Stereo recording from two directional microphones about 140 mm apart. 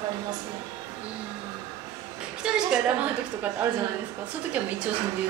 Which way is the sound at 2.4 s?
5° right (ahead or behind).